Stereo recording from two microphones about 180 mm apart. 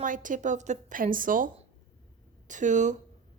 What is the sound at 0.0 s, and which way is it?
A woman's voice, 50° right (ahead or behind).